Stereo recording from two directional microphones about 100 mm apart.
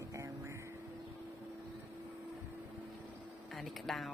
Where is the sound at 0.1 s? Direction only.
30° right (ahead or behind).